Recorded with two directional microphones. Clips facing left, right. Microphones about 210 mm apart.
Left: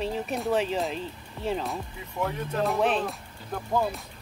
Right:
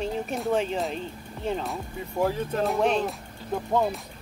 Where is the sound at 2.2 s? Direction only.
30° right (ahead or behind).